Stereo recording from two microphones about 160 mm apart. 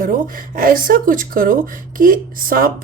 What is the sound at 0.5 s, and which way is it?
Speech, 60° right (ahead or behind).